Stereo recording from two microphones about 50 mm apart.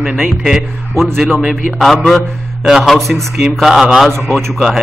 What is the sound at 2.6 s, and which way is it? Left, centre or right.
A man's voice, centre.